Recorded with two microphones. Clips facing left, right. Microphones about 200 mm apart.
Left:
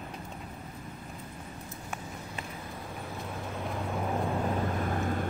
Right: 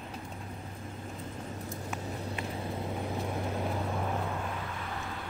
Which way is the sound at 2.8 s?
15° right (ahead or behind).